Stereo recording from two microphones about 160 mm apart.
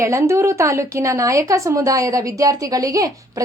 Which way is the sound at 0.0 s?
20° right (ahead or behind).